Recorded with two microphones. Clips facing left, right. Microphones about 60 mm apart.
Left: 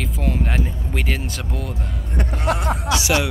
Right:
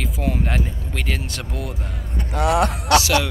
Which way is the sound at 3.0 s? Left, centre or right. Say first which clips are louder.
Even; centre.